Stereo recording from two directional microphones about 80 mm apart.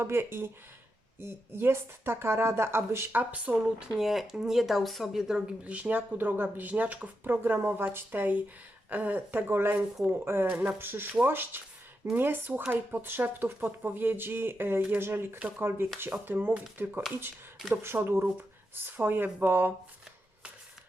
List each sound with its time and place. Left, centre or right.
0.0 s speech: right
3.9 s speech: centre
5.6 s speech: centre
10.5 s speech: centre
10.8 s speech: right
15.4 s speech: centre
16.1 s speech: right